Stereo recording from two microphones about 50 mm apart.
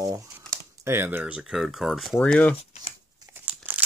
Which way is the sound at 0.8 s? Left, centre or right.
Right.